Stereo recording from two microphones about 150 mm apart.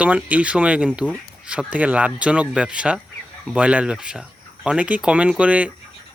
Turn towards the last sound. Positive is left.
turn(degrees=-10)  # may be behind; listen again after turning